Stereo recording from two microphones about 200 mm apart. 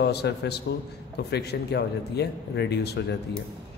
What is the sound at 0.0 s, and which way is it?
A man's voice, 55° left (ahead or behind).